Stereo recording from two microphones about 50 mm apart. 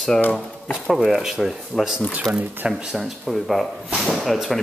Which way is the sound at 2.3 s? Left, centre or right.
Right.